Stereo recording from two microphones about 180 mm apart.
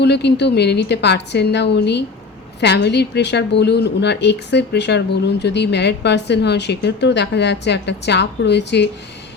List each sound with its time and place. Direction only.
0.0 s speech: 70° left (ahead or behind)